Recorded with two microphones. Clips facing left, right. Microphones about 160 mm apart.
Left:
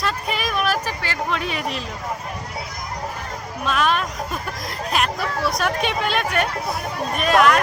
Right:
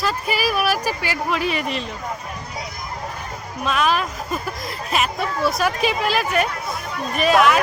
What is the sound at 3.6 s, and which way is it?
Speech, centre (ahead or behind).